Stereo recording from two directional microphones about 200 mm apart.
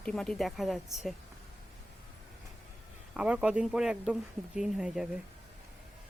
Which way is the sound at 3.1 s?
5° right (ahead or behind).